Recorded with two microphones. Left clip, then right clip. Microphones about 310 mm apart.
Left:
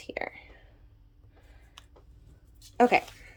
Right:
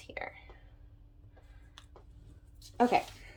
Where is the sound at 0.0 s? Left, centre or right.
Centre.